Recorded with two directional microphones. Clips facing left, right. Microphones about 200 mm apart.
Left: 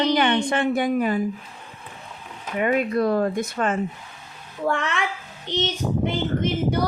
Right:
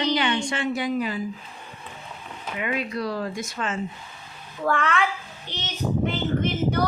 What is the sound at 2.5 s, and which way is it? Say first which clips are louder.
Speech: left 7 dB; 45° left (ahead or behind).